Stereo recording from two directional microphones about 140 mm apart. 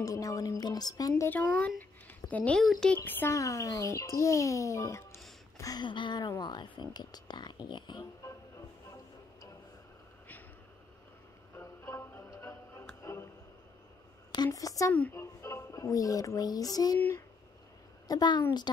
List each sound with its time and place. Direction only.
0.0 s a child's voice: 25° left (ahead or behind); by 3.0 s 5° left (ahead or behind)
3.0 s a child's voice: 15° left (ahead or behind)
11.5 s music: 20° left (ahead or behind)
13.0 s a sound: 20° left (ahead or behind)
14.3 s a sound: 25° left (ahead or behind)
15.1 s speech: 20° left (ahead or behind)
18.0 s a woman's voice: 30° left (ahead or behind)